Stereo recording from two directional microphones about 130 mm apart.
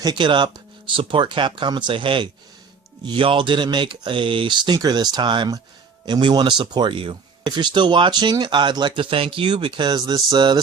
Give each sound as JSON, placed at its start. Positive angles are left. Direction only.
{"t": 0.0, "sound": "speech", "side_deg": -35}